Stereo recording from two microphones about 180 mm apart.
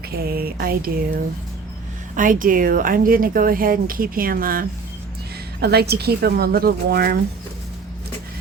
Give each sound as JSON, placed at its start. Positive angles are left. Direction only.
{"t": 0.1, "sound": "a woman's voice", "side_deg": -60}
{"t": 2.1, "sound": "speech", "side_deg": -50}
{"t": 5.5, "sound": "a woman's voice", "side_deg": -65}